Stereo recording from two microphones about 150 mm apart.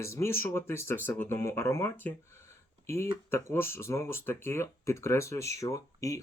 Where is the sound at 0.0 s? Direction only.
20° left (ahead or behind).